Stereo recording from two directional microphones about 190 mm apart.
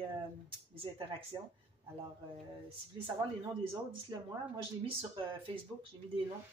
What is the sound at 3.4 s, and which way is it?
A woman's voice, 20° right (ahead or behind).